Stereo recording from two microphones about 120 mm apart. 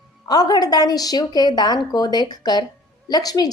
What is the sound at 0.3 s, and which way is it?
A woman's voice, 35° left (ahead or behind).